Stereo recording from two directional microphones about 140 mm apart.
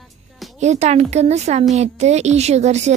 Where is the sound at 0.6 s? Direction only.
55° right (ahead or behind).